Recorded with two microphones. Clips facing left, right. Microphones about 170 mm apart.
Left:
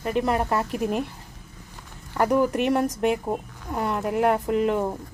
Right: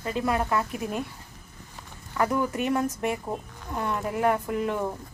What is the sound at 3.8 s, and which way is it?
Speech, 30° left (ahead or behind).